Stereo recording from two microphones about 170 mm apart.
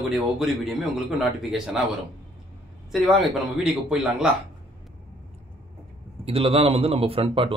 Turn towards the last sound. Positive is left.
turn(degrees=-30)  # may be behind; listen again after turning